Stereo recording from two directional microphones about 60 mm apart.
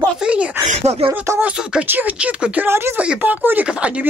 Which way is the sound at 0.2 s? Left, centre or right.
Right.